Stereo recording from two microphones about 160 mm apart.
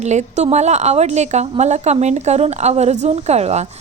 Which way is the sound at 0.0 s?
45° right (ahead or behind).